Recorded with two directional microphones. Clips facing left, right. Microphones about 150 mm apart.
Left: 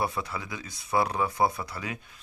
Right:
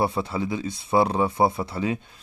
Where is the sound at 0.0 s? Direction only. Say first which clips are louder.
Right 6 dB; 30° right (ahead or behind).